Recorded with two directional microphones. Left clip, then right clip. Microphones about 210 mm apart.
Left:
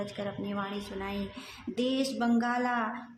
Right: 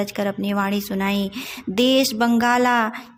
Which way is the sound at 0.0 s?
35° right (ahead or behind).